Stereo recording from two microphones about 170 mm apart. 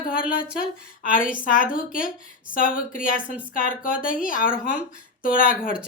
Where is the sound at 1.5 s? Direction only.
55° left (ahead or behind).